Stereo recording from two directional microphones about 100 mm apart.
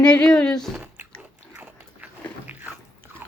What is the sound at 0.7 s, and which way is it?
Chewing, 20° right (ahead or behind).